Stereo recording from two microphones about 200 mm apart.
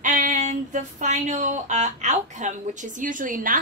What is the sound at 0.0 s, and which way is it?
Speech, 40° right (ahead or behind).